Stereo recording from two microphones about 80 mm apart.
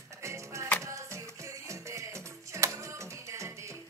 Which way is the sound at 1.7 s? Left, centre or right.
Right.